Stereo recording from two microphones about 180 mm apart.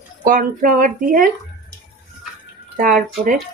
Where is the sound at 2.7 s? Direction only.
50° right (ahead or behind).